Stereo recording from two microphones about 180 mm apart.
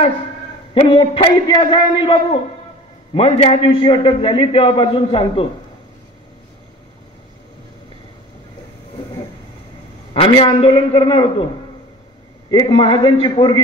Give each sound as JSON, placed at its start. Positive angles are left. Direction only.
{"t": 0.7, "sound": "a man's voice", "side_deg": 30}
{"t": 3.2, "sound": "a man's voice", "side_deg": 30}
{"t": 10.1, "sound": "a man's voice", "side_deg": 30}
{"t": 12.4, "sound": "a man's voice", "side_deg": 25}